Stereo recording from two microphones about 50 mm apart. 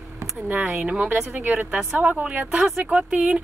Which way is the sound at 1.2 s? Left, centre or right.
Right.